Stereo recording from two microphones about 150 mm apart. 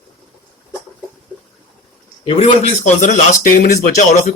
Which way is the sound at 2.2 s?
40° left (ahead or behind).